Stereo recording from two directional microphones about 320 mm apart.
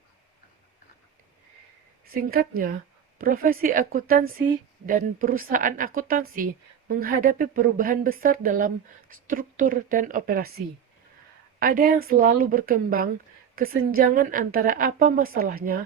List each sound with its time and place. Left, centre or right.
2.1 s speech: right
11.6 s speech: right